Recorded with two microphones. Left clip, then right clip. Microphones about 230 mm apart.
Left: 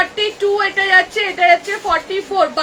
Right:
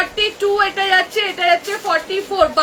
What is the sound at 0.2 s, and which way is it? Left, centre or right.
Speech, centre.